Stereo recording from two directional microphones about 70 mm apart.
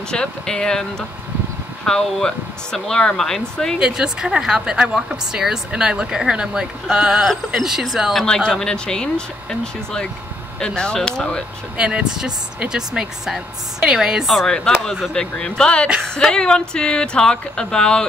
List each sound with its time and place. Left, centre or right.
0.1 s speech: centre
3.8 s a woman's voice: centre
11.7 s a woman's voice: centre
14.9 s speech: centre